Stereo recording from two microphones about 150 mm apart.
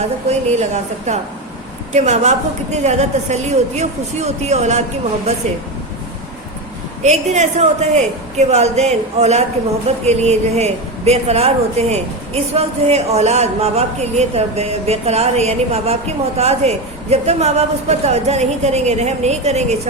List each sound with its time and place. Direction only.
0.3 s speech: 50° right (ahead or behind)
7.0 s speech: 50° right (ahead or behind)